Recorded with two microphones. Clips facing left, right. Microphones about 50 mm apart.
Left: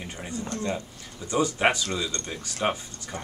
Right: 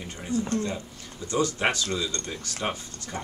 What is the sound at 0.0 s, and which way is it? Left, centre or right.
Speech, centre.